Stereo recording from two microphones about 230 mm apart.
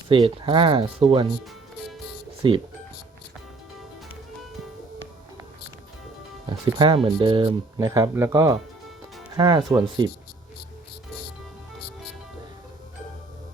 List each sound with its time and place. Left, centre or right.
0.1 s speech: right
2.4 s speech: right
6.7 s speech: right